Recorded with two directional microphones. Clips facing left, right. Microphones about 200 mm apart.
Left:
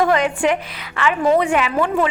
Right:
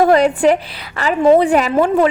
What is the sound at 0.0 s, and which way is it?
A woman's voice, 35° right (ahead or behind).